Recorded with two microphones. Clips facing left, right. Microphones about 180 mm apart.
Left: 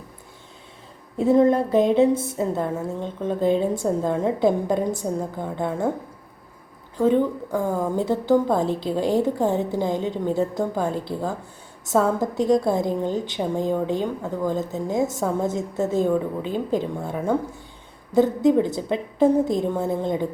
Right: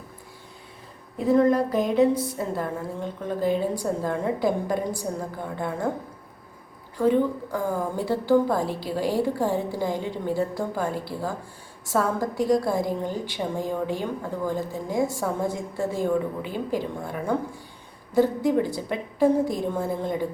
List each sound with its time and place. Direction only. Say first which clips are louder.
1.2 s a woman's voice: left 2 dB; 25° left (ahead or behind)
7.0 s a woman's voice: left 2 dB; 20° left (ahead or behind)